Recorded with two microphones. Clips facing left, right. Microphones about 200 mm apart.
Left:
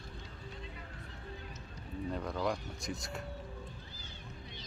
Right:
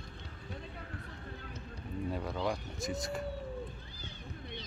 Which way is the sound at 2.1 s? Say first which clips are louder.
Left 1 dB; 5° right (ahead or behind).